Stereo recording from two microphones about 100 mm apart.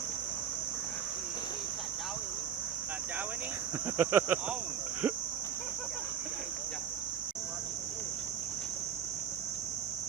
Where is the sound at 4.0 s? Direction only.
20° right (ahead or behind).